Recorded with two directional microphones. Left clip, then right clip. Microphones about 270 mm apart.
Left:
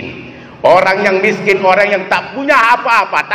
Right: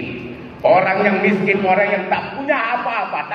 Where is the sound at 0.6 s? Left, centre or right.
Left.